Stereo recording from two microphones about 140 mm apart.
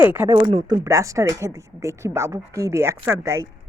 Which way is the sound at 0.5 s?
35° right (ahead or behind).